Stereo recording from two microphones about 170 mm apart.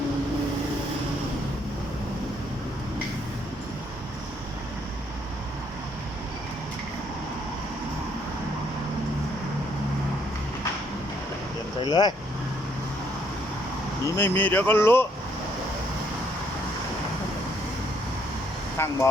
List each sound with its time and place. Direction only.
11.8 s speech: 25° left (ahead or behind)
14.0 s speech: 15° left (ahead or behind)
18.8 s speech: 15° left (ahead or behind)